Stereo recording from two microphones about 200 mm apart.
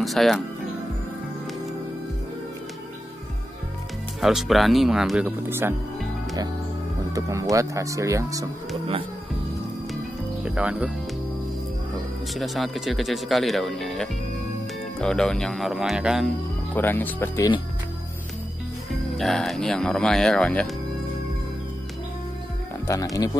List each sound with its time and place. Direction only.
0.0 s speech: centre (ahead or behind)
4.2 s speech: centre (ahead or behind)
7.1 s speech: 15° right (ahead or behind)
10.4 s speech: 5° right (ahead or behind)
11.9 s speech: centre (ahead or behind)
16.7 s speech: 10° left (ahead or behind)
19.1 s speech: centre (ahead or behind)